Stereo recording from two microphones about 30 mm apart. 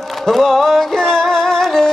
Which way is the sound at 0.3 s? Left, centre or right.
Centre.